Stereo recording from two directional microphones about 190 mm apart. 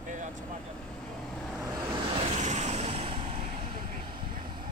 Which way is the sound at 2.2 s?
35° right (ahead or behind).